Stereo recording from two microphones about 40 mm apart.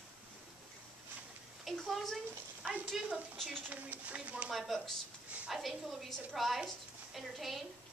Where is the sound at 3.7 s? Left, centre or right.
Right.